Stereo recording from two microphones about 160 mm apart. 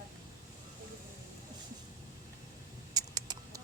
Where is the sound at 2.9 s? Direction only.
25° right (ahead or behind).